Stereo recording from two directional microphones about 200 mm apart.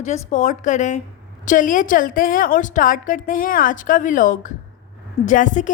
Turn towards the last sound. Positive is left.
turn(degrees=40)  # may be behind; listen again after turning